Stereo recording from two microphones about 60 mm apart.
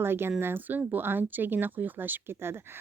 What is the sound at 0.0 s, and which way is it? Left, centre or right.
Speech, right.